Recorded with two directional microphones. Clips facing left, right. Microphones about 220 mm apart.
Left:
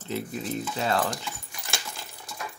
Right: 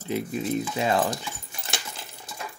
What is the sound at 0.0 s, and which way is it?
Speech, 15° right (ahead or behind).